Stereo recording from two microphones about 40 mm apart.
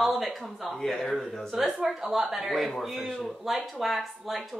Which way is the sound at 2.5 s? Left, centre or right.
Centre.